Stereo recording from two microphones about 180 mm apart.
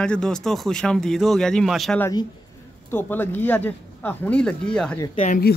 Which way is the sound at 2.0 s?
20° left (ahead or behind).